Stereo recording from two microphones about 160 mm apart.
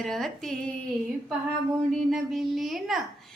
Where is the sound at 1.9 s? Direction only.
Centre (ahead or behind).